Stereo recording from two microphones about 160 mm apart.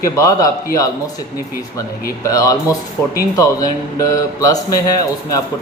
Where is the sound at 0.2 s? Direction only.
20° left (ahead or behind).